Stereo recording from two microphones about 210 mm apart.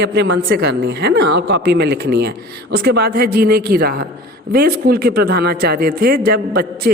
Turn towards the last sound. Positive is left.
turn(degrees=-45)  # may be behind; listen again after turning